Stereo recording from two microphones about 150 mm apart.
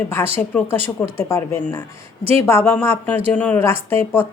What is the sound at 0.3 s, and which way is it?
A woman's voice, 15° left (ahead or behind).